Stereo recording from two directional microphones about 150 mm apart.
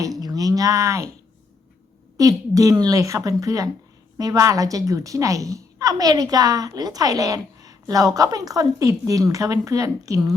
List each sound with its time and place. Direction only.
0.0 s speech: 25° right (ahead or behind)
2.1 s a woman's voice: 20° right (ahead or behind)